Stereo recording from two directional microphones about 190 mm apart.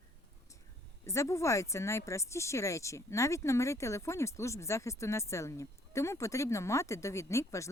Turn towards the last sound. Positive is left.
turn(degrees=15)  # may be behind; listen again after turning